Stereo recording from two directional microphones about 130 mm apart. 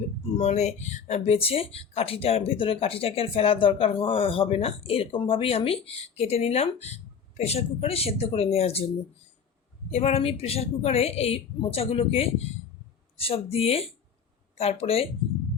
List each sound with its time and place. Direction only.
0.3 s speech: 60° left (ahead or behind)
9.9 s speech: 55° left (ahead or behind)